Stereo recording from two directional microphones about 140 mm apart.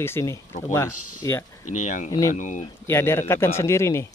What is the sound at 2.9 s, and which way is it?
Speech, 20° left (ahead or behind).